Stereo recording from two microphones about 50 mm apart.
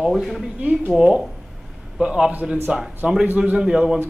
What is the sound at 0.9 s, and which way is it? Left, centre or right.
A man's voice, centre.